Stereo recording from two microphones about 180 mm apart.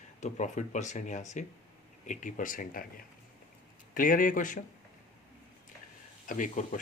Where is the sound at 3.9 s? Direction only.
50° left (ahead or behind).